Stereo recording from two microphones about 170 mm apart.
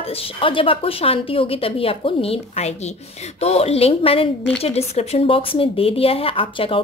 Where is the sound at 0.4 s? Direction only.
30° left (ahead or behind).